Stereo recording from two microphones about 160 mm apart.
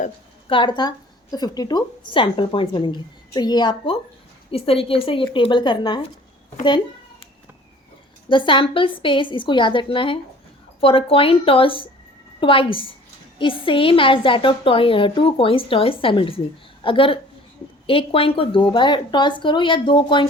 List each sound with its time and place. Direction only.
0.4 s a woman's voice: 30° left (ahead or behind)
8.3 s a woman's voice: 30° left (ahead or behind)